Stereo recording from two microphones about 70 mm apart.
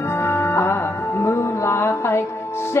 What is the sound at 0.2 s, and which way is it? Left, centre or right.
Music, left.